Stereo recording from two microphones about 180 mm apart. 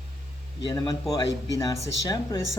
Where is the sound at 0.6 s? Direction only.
20° left (ahead or behind).